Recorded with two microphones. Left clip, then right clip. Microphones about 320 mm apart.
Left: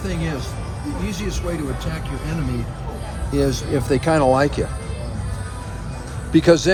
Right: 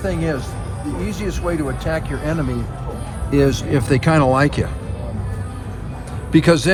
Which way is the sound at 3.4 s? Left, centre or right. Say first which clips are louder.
Right 2 dB; right.